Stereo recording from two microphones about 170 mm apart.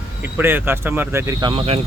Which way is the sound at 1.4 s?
30° right (ahead or behind).